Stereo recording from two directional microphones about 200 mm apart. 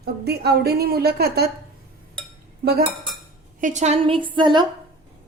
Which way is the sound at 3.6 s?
35° right (ahead or behind).